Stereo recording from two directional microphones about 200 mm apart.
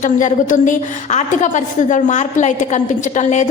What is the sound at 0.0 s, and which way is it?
A woman's voice, 40° left (ahead or behind).